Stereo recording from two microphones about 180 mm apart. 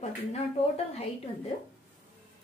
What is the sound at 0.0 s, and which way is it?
A woman's voice, 35° left (ahead or behind).